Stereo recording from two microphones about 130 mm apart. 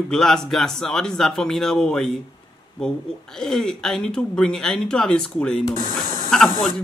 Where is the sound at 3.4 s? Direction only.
5° left (ahead or behind).